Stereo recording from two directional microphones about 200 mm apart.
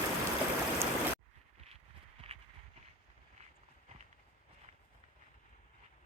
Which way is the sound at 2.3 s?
30° right (ahead or behind).